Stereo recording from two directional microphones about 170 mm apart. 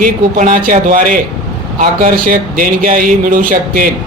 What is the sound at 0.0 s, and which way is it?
Speech, 50° right (ahead or behind).